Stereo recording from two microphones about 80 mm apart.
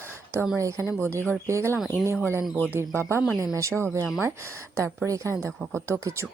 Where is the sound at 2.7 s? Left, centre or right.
Right.